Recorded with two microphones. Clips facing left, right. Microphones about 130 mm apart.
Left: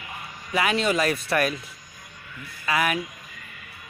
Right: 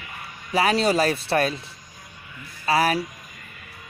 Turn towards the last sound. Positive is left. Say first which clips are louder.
# right 4 dB
turn(degrees=-35)  # may be behind; listen again after turning